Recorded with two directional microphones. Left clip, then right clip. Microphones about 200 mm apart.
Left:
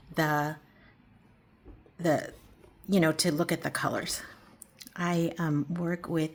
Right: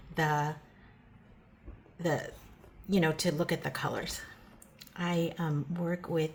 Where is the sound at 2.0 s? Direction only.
45° left (ahead or behind).